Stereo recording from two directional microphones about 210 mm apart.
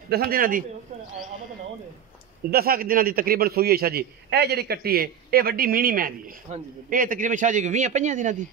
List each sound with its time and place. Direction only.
0.1 s a man's voice: 45° right (ahead or behind)
2.5 s a man's voice: 45° right (ahead or behind)